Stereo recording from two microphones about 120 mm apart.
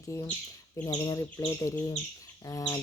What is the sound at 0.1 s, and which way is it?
Speech, 25° left (ahead or behind).